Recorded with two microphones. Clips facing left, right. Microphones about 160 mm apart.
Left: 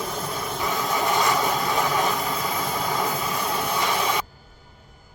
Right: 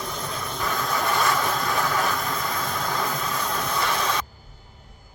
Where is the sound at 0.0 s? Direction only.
5° left (ahead or behind).